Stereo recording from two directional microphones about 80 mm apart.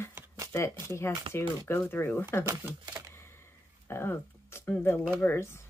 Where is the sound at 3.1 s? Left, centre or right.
Left.